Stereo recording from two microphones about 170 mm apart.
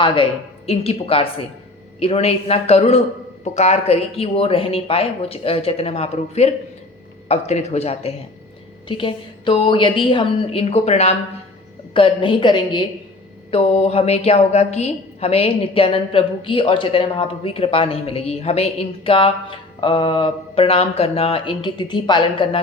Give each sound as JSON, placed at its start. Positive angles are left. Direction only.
{"t": 0.7, "sound": "a woman's voice", "side_deg": 35}